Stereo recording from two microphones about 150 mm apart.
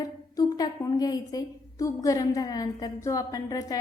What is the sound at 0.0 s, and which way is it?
A woman's voice, 25° left (ahead or behind).